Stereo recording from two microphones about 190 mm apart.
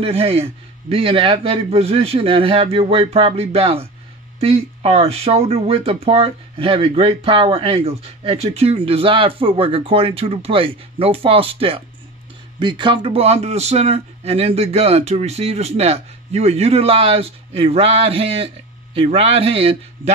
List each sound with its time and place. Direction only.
0.0 s speech: 30° right (ahead or behind)